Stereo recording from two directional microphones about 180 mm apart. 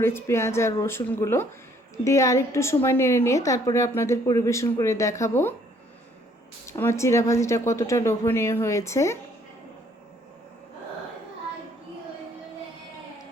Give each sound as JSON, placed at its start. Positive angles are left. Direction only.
{"t": 0.0, "sound": "a woman's voice", "side_deg": 15}
{"t": 6.7, "sound": "a woman's voice", "side_deg": 15}